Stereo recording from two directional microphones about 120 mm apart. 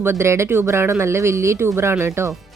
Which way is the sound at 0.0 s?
20° right (ahead or behind).